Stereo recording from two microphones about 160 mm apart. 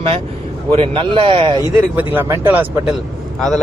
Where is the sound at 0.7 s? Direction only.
35° right (ahead or behind).